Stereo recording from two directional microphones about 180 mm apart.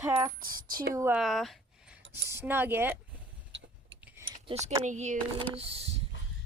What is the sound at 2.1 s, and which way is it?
Speech, 10° right (ahead or behind).